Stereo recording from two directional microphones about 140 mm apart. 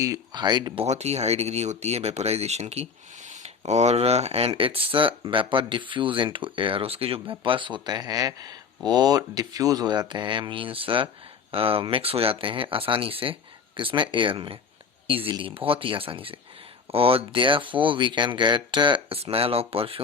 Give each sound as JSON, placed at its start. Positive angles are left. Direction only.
{"t": 0.0, "sound": "speech", "side_deg": -25}
{"t": 0.9, "sound": "speech", "side_deg": -50}